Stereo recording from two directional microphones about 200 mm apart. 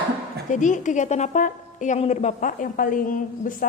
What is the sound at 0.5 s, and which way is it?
A woman's voice, 40° left (ahead or behind).